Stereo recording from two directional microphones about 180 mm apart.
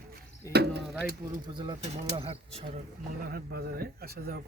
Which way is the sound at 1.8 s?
35° right (ahead or behind).